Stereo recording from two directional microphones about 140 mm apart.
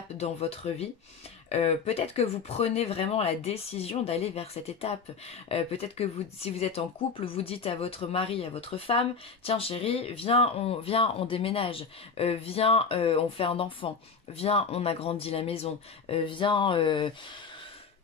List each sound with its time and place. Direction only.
0.2 s speech: 45° left (ahead or behind)